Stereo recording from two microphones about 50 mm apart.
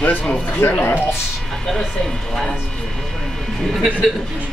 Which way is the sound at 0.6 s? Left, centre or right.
Left.